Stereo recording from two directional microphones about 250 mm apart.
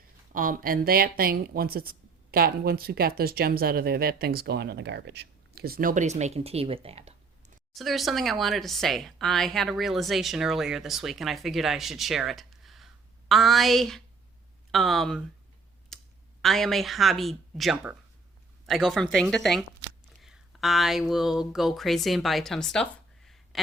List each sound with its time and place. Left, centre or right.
0.3 s speech: right
7.7 s speech: centre
15.9 s clicking: centre
16.4 s speech: centre